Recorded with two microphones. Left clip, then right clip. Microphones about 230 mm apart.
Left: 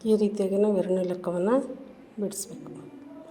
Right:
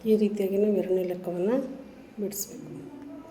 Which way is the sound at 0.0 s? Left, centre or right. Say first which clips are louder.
Even; left.